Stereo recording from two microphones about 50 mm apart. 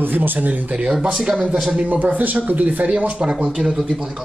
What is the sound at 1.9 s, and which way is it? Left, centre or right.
Speech, right.